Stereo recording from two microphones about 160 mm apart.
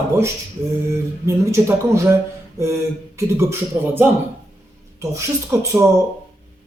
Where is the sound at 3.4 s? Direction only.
15° right (ahead or behind).